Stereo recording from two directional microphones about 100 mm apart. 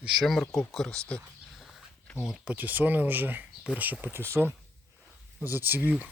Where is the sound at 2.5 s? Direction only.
15° right (ahead or behind).